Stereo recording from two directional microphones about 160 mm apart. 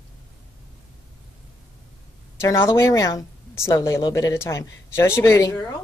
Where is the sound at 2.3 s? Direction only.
15° left (ahead or behind).